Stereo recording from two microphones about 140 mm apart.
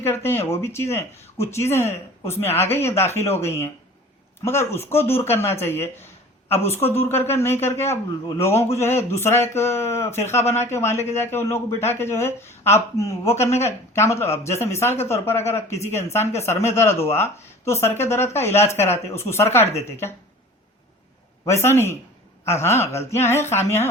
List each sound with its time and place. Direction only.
0.0 s speech: 15° left (ahead or behind)
21.4 s speech: 20° left (ahead or behind)